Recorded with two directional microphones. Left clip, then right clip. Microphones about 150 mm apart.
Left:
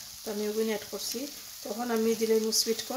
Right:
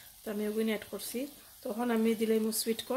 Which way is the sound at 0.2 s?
20° right (ahead or behind).